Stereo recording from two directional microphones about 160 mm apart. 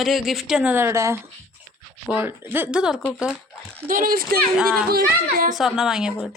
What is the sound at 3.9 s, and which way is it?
Speech, 60° right (ahead or behind).